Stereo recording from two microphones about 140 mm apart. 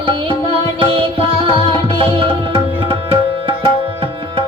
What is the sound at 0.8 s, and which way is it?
Music, 40° right (ahead or behind).